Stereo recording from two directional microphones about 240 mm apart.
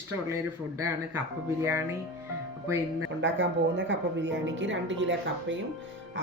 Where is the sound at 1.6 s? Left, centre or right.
Centre.